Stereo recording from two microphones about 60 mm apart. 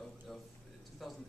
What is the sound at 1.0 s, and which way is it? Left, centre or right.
Speech, centre.